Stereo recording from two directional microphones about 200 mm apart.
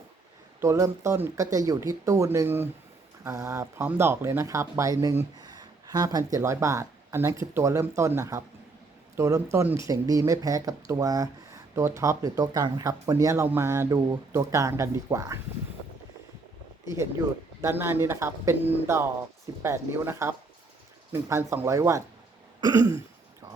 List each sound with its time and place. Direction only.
0.6 s speech: 15° right (ahead or behind)
16.8 s speech: 15° right (ahead or behind)